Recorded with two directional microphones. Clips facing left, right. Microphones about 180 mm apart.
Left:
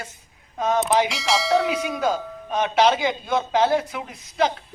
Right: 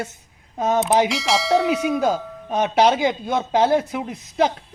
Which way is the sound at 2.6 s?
45° right (ahead or behind).